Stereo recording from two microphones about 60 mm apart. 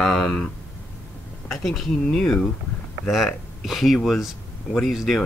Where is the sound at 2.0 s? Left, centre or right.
Centre.